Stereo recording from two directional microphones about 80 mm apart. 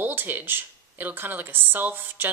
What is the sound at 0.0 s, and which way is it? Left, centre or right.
Speech, right.